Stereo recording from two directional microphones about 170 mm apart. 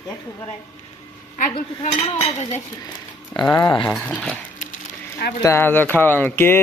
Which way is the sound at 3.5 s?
20° left (ahead or behind).